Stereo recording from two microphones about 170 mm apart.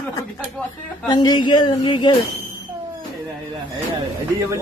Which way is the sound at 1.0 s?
25° left (ahead or behind).